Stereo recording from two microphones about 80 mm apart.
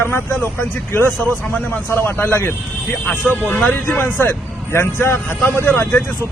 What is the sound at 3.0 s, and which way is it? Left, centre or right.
A man's voice, centre.